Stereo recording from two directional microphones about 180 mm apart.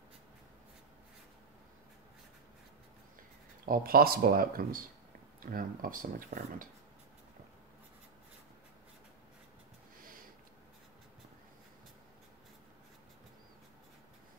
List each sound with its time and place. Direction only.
3.6 s speech: 55° right (ahead or behind)